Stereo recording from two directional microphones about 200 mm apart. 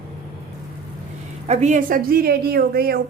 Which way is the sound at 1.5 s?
35° right (ahead or behind).